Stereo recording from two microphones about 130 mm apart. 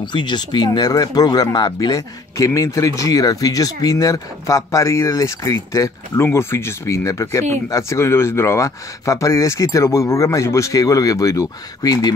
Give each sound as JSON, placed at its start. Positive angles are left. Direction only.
{"t": 0.0, "sound": "speech", "side_deg": 35}